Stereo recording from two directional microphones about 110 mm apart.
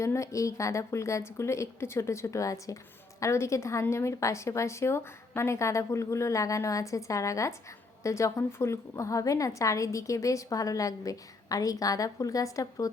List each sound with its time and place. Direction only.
0.0 s a woman's voice: 25° left (ahead or behind)